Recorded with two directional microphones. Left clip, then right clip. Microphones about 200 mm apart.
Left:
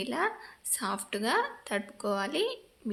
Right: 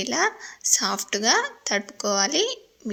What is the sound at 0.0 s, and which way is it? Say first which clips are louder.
A woman's voice: right 7 dB; 25° right (ahead or behind).